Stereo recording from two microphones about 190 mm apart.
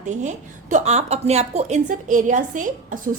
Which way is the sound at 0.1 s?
40° right (ahead or behind).